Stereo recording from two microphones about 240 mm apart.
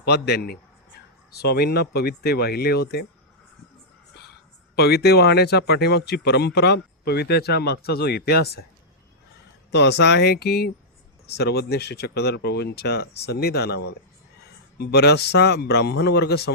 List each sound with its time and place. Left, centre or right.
0.0 s speech: left
4.7 s speech: left
9.7 s speech: left